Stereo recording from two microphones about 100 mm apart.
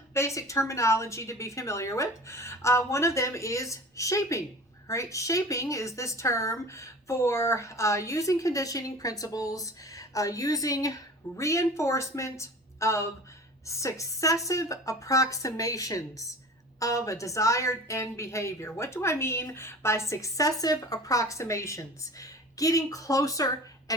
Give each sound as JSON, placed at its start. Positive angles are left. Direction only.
{"t": 0.1, "sound": "a woman's voice", "side_deg": 30}